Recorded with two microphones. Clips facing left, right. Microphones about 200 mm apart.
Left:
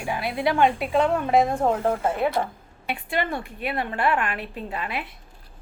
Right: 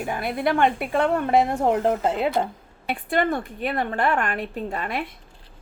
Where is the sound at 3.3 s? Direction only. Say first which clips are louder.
Right 3 dB; 45° right (ahead or behind).